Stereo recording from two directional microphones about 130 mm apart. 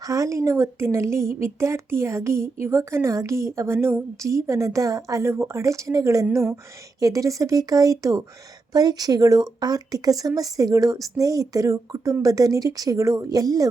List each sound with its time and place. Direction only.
0.0 s a woman's voice: 25° right (ahead or behind)